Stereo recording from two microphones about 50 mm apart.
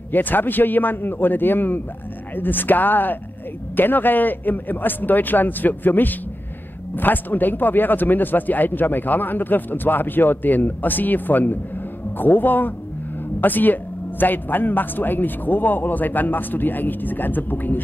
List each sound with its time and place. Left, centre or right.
0.1 s speech: left